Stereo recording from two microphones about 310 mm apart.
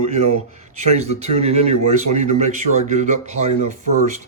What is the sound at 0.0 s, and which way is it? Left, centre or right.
Speech, right.